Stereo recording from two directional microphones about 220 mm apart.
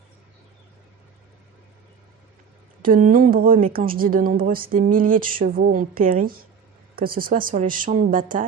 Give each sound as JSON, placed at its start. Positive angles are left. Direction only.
{"t": 2.8, "sound": "a woman's voice", "side_deg": -40}